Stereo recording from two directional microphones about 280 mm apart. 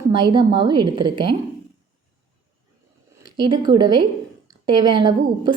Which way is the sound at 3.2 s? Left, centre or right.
Centre.